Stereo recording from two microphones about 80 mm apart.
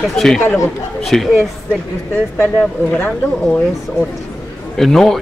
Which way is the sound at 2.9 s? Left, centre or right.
Centre.